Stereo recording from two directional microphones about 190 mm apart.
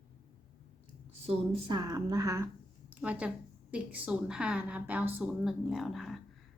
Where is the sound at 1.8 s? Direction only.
20° right (ahead or behind).